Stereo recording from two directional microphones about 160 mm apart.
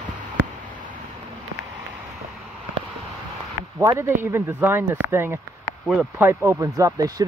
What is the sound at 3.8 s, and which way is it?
Speech, 20° right (ahead or behind).